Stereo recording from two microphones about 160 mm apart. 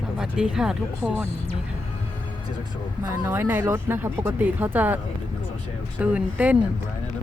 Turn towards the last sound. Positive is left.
turn(degrees=-10)  # may be behind; listen again after turning